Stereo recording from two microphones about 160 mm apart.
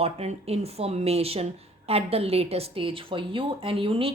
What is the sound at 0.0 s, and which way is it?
A woman's voice, 40° right (ahead or behind).